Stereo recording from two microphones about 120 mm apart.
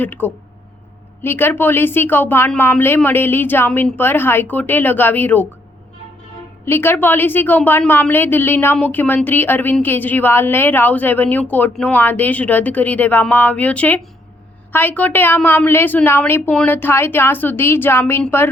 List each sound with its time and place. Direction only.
0.0 s a woman's voice: 15° left (ahead or behind)
6.7 s a woman's voice: 20° left (ahead or behind)